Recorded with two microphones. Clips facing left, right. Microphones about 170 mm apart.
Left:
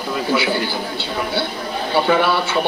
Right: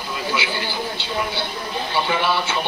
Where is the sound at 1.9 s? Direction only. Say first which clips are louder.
Left 6 dB; 55° left (ahead or behind).